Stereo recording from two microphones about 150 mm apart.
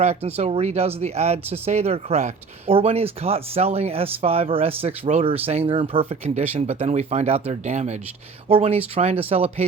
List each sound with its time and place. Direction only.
0.0 s speech: 45° right (ahead or behind)